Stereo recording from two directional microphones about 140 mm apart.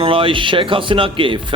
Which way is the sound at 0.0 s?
40° right (ahead or behind).